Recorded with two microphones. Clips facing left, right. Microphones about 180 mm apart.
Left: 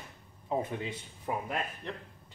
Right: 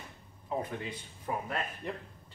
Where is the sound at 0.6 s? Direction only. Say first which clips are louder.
Left 1 dB; 25° left (ahead or behind).